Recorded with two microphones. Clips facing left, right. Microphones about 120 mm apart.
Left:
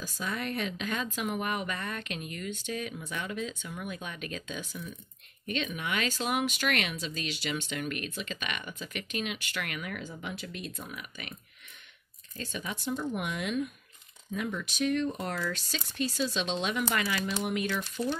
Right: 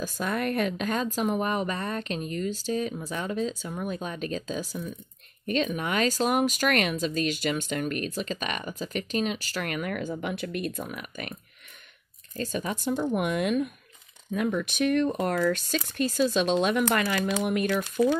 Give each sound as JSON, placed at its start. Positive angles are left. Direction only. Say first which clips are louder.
{"t": 0.0, "sound": "speech", "louder": "right 6 dB", "side_deg": -50}
{"t": 12.4, "sound": "speech", "louder": "right 7 dB", "side_deg": -40}
{"t": 12.9, "sound": "speech", "louder": "right 7 dB", "side_deg": -60}